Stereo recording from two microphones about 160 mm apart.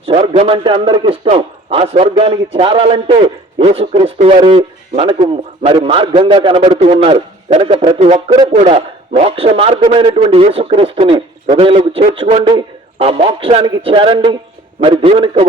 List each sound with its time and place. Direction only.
0.0 s a man's voice: 40° right (ahead or behind)
7.9 s a man's voice: 45° right (ahead or behind)